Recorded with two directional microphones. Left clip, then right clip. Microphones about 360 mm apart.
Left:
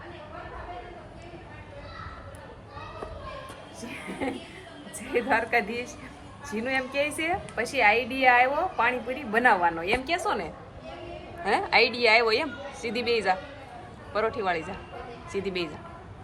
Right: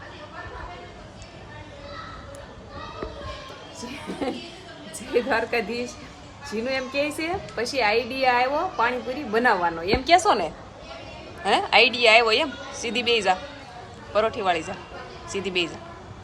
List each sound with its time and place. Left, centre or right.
5.1 s a woman's voice: centre
6.7 s a woman's voice: centre
10.0 s a woman's voice: right
11.4 s a woman's voice: centre